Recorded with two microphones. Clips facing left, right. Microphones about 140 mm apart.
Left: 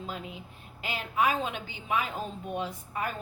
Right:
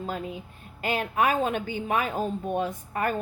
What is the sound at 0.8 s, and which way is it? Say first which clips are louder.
Speech: right 4 dB; 50° right (ahead or behind).